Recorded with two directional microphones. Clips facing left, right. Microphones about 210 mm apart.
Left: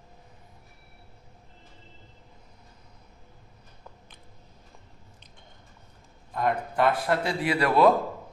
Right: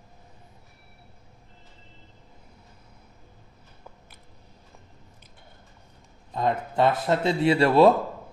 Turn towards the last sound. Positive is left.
turn(degrees=-25)  # may be behind; listen again after turning